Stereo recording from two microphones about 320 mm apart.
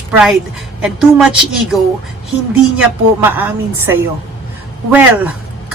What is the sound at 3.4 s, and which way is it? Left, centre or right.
Speech, centre.